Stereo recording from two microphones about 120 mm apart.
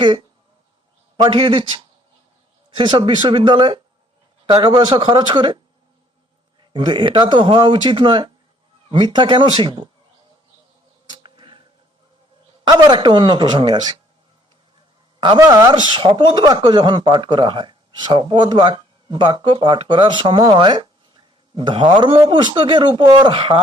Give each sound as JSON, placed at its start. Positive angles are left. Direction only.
{"t": 0.0, "sound": "speech", "side_deg": -40}
{"t": 2.7, "sound": "speech", "side_deg": -40}
{"t": 6.6, "sound": "speech", "side_deg": -40}
{"t": 11.2, "sound": "a sound", "side_deg": -45}
{"t": 12.6, "sound": "speech", "side_deg": -40}
{"t": 15.4, "sound": "speech", "side_deg": -35}